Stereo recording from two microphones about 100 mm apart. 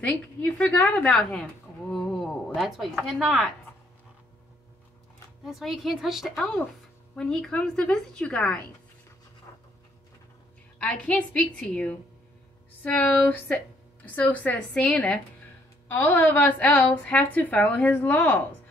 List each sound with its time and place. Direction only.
0.0 s a woman's voice: 15° left (ahead or behind)
2.1 s speech: centre (ahead or behind)
5.4 s a woman's voice: centre (ahead or behind)
10.8 s a woman's voice: 15° left (ahead or behind)